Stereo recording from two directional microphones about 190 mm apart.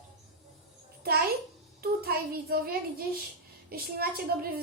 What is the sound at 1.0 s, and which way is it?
Speech, 55° right (ahead or behind).